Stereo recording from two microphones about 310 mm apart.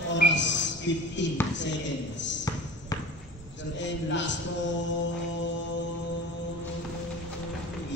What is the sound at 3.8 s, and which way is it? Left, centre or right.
Speech, left.